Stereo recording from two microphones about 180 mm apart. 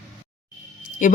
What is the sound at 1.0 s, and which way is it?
Speech, 45° left (ahead or behind).